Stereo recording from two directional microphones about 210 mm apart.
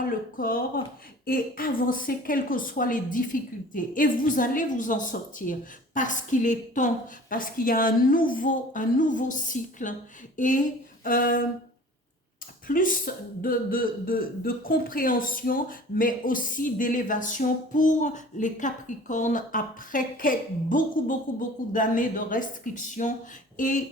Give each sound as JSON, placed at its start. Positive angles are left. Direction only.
{"t": 0.3, "sound": "a woman's voice", "side_deg": 40}
{"t": 12.6, "sound": "a woman's voice", "side_deg": 40}